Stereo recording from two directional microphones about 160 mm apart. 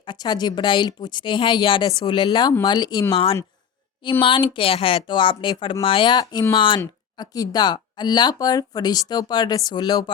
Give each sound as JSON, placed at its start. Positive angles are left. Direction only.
{"t": 0.0, "sound": "speech", "side_deg": 30}
{"t": 4.2, "sound": "speech", "side_deg": 30}